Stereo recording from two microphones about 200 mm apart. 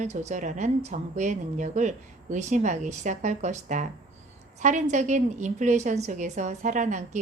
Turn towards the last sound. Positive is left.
turn(degrees=-40)  # may be behind; listen again after turning